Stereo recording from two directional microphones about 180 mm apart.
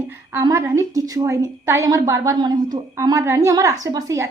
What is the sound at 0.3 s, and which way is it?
A woman's voice, 20° right (ahead or behind).